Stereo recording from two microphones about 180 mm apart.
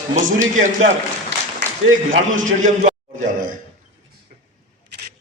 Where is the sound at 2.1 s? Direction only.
45° right (ahead or behind).